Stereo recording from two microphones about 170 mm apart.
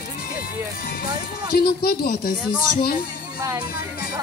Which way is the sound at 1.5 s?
60° left (ahead or behind).